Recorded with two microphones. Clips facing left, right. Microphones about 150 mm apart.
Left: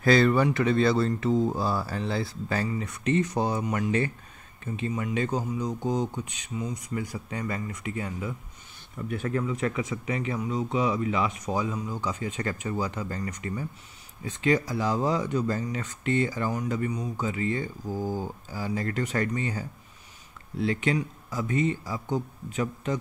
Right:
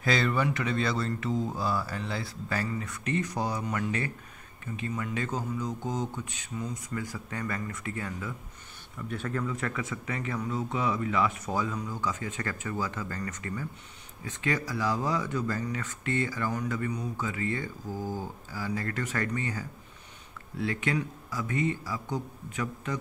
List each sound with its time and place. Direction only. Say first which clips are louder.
0.0 s speech: left 6 dB; 40° left (ahead or behind); by 22.9 s 25° left (ahead or behind)